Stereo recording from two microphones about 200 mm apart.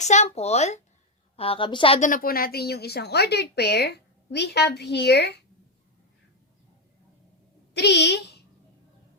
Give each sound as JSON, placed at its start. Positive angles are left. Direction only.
{"t": 0.0, "sound": "a woman's voice", "side_deg": 35}
{"t": 7.7, "sound": "speech", "side_deg": 55}